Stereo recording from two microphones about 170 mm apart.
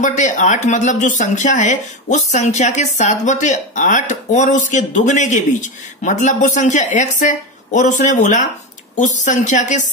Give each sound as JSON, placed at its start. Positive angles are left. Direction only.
{"t": 0.0, "sound": "speech", "side_deg": 45}